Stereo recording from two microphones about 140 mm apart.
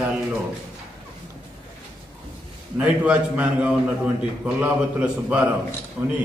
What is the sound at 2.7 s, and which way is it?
A man's voice, 10° right (ahead or behind).